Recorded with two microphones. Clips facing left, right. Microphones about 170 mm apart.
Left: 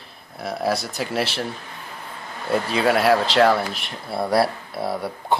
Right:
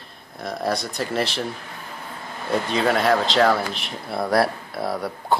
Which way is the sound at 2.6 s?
5° left (ahead or behind).